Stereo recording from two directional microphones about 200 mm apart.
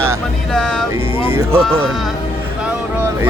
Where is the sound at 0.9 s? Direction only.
10° right (ahead or behind).